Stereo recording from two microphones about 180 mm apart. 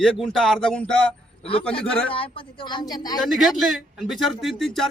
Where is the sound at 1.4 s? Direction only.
30° left (ahead or behind).